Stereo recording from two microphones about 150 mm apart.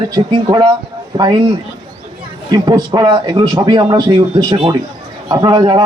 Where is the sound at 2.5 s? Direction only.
30° right (ahead or behind).